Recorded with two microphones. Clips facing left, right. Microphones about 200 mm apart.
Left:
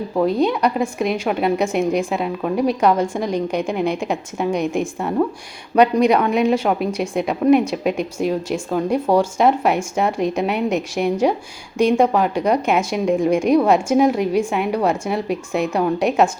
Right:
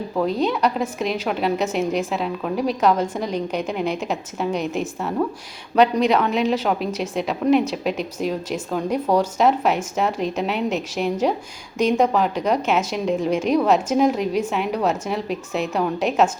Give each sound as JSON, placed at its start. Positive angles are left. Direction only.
{"t": 0.2, "sound": "speech", "side_deg": 10}
{"t": 6.2, "sound": "a woman's voice", "side_deg": 55}
{"t": 6.5, "sound": "speech", "side_deg": 10}